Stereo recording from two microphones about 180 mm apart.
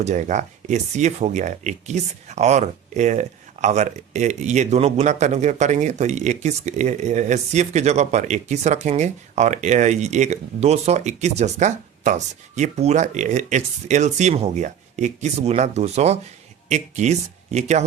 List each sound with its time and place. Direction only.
0.0 s speech: 45° right (ahead or behind)